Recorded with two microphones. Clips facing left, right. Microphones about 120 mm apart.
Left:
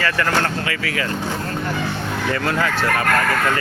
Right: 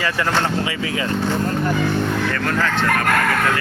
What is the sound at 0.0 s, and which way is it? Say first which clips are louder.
Speech: even; 15° right (ahead or behind).